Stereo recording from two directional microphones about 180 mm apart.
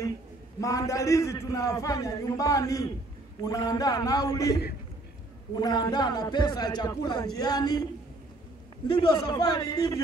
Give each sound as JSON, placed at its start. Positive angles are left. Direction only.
{"t": 0.6, "sound": "a man's voice", "side_deg": 20}
{"t": 5.6, "sound": "a man's voice", "side_deg": 20}
{"t": 8.8, "sound": "a man's voice", "side_deg": 25}